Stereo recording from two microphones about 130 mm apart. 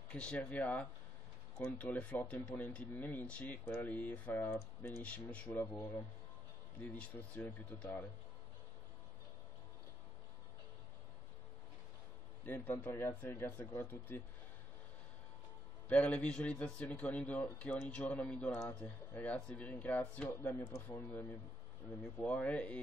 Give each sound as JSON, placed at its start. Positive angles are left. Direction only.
{"t": 0.1, "sound": "speech", "side_deg": 10}
{"t": 5.0, "sound": "speech", "side_deg": 10}
{"t": 6.8, "sound": "speech", "side_deg": 10}
{"t": 12.4, "sound": "speech", "side_deg": 15}
{"t": 15.9, "sound": "speech", "side_deg": 10}
{"t": 22.2, "sound": "speech", "side_deg": 10}